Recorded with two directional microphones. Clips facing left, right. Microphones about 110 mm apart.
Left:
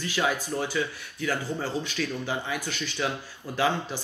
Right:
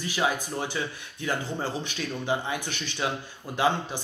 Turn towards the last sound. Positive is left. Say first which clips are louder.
# right 1 dB
turn(degrees=-20)  # may be behind; listen again after turning